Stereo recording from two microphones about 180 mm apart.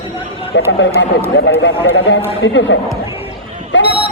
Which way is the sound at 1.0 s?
80° left.